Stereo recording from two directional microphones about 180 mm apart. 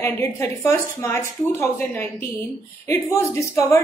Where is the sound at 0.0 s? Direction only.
15° left (ahead or behind).